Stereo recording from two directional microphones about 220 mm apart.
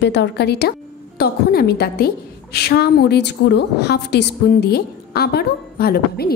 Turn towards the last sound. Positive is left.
turn(degrees=45)  # may be behind; listen again after turning